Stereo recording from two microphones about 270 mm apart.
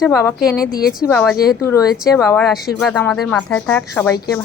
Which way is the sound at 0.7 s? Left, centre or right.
Left.